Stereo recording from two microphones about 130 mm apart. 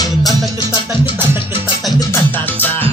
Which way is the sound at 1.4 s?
40° left (ahead or behind).